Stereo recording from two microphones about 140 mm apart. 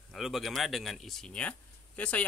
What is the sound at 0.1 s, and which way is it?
Speech, centre (ahead or behind).